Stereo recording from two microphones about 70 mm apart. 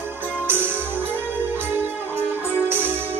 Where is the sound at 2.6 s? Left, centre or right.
Right.